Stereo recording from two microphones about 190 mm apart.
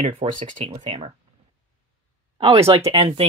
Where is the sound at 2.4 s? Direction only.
30° right (ahead or behind).